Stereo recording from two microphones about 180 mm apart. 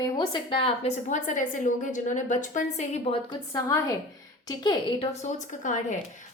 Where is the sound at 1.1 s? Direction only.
45° left (ahead or behind).